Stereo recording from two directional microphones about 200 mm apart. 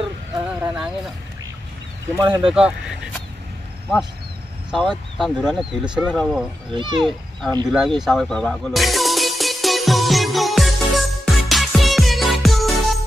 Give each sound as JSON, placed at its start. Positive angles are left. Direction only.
{"t": 0.5, "sound": "speech", "side_deg": -5}
{"t": 2.1, "sound": "speech", "side_deg": -20}
{"t": 2.5, "sound": "speech", "side_deg": -5}
{"t": 4.6, "sound": "speech", "side_deg": 0}
{"t": 6.7, "sound": "speech", "side_deg": -25}
{"t": 7.0, "sound": "speech", "side_deg": 0}
{"t": 7.7, "sound": "music", "side_deg": 0}